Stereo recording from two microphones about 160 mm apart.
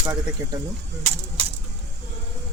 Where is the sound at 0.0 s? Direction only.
25° right (ahead or behind).